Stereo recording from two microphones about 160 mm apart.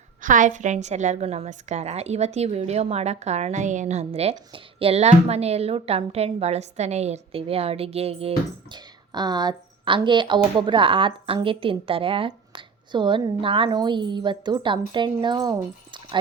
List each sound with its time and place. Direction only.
0.2 s a woman's voice: 55° right (ahead or behind); by 8.3 s 40° right (ahead or behind)
8.7 s speech: 25° right (ahead or behind)